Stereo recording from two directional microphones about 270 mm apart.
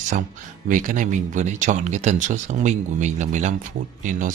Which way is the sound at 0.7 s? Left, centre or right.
Right.